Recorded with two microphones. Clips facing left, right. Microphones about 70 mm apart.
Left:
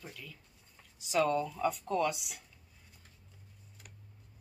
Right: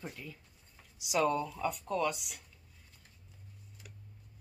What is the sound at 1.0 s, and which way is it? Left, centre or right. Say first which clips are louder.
Speech: left 1 dB; centre.